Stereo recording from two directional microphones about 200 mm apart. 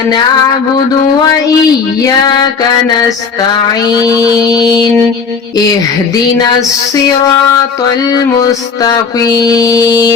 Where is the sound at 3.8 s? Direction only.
20° left (ahead or behind).